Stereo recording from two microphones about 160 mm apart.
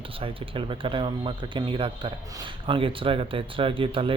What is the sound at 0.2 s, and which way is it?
Speech, 35° right (ahead or behind).